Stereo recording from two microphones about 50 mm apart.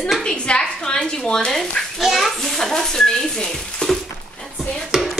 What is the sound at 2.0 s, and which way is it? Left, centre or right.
Frying, centre.